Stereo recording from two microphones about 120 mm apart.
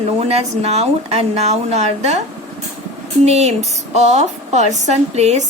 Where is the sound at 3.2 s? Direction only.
65° right (ahead or behind).